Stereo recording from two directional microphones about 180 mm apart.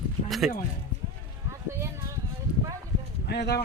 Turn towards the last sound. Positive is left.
turn(degrees=65)  # may be behind; listen again after turning